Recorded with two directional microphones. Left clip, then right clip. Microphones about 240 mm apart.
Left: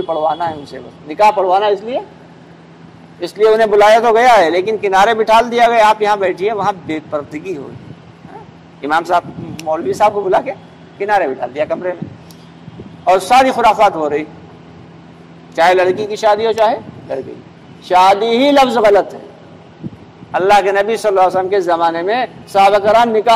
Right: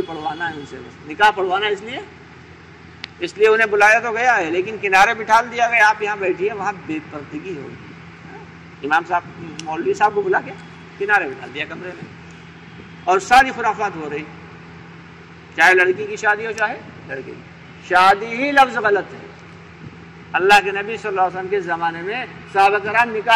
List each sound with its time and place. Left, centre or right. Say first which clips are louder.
0.1 s a man's voice: left 9 dB; left
3.2 s a man's voice: left 4 dB; left
8.8 s a man's voice: left 5 dB; left
13.3 s a man's voice: left 3 dB; left
15.5 s a man's voice: left 2 dB; left
20.2 s a man's voice: left 3 dB; left